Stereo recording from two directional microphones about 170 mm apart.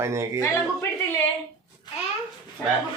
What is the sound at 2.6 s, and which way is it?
Speech, 10° left (ahead or behind).